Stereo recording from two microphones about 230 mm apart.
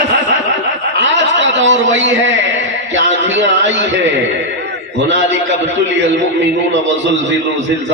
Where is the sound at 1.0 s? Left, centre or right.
Right.